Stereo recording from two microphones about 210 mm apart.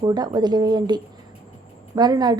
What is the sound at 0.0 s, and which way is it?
A woman's voice, 20° right (ahead or behind).